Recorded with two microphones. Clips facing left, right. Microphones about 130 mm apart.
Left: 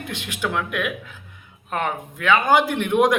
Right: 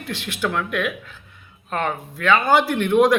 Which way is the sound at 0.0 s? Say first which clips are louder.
Right 2 dB; 15° left (ahead or behind).